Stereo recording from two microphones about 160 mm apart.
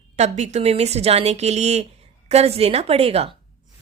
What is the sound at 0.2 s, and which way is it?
A woman's voice, 45° right (ahead or behind).